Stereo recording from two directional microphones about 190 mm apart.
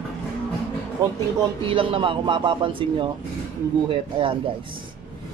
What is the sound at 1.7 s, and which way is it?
Speech, 30° right (ahead or behind).